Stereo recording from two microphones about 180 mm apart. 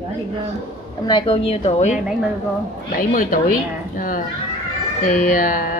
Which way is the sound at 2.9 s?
50° left (ahead or behind).